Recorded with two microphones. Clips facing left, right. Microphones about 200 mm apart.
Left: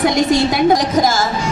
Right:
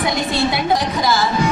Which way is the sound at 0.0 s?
45° left (ahead or behind).